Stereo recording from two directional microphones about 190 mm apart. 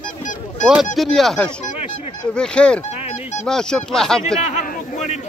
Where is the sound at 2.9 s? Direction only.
35° left (ahead or behind).